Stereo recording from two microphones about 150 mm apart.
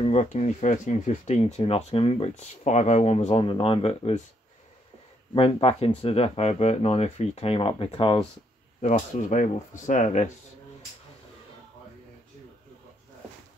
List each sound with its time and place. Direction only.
0.0 s speech: 50° left (ahead or behind)
3.4 s speech: 35° left (ahead or behind)
5.3 s speech: 40° left (ahead or behind)
8.8 s speech: 50° left (ahead or behind)